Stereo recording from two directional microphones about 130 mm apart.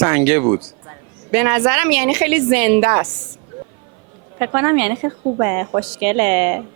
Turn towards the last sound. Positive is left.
turn(degrees=-20)  # may be behind; listen again after turning